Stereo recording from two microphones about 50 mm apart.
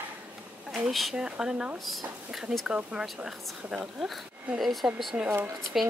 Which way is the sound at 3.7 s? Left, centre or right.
Centre.